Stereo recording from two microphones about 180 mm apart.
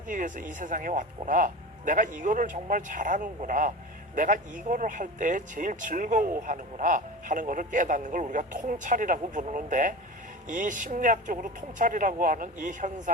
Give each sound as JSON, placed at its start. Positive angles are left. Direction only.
{"t": 0.1, "sound": "speech", "side_deg": -45}